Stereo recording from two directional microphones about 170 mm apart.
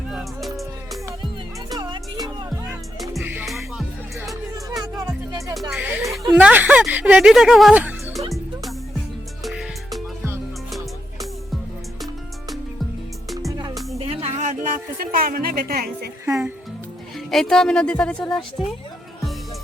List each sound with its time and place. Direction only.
0.1 s music: centre (ahead or behind)
1.7 s music: 25° right (ahead or behind)
3.2 s music: 5° right (ahead or behind)
4.7 s music: 20° right (ahead or behind)
5.7 s music: 5° right (ahead or behind)
6.0 s a sound: 20° right (ahead or behind)
6.4 s speech: 10° right (ahead or behind)
9.4 s music: centre (ahead or behind)
14.0 s a sound: 35° right (ahead or behind); by 16.0 s 65° right (ahead or behind)
17.2 s speech: 5° left (ahead or behind)